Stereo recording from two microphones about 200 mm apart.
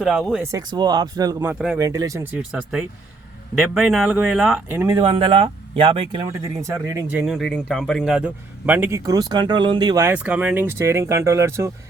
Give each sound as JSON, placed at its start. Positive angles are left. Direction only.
{"t": 0.0, "sound": "speech", "side_deg": 0}
{"t": 0.5, "sound": "speech", "side_deg": -20}
{"t": 1.8, "sound": "a man's voice", "side_deg": -15}
{"t": 6.4, "sound": "a man's voice", "side_deg": -15}
{"t": 7.3, "sound": "a man's voice", "side_deg": 0}